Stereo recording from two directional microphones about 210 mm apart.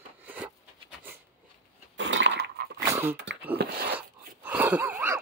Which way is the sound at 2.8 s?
10° right (ahead or behind).